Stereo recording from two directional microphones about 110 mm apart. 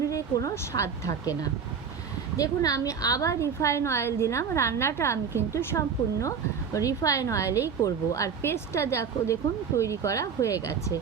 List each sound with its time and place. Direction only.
0.0 s a woman's voice: 30° left (ahead or behind)